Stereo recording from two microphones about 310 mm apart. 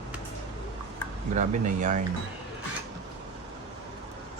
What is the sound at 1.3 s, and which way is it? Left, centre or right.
Speech, right.